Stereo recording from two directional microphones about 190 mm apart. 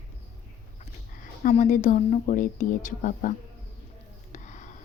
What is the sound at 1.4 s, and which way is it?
A woman's voice, 40° left (ahead or behind).